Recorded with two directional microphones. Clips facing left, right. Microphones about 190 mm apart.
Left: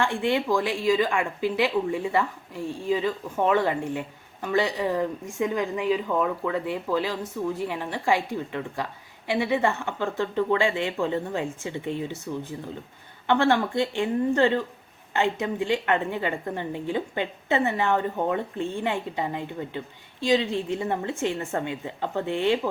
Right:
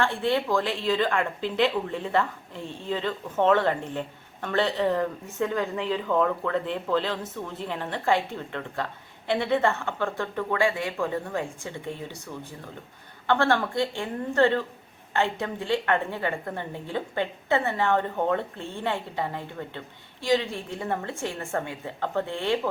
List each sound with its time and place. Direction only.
0.0 s a woman's voice: 15° left (ahead or behind)
13.2 s a woman's voice: 20° left (ahead or behind)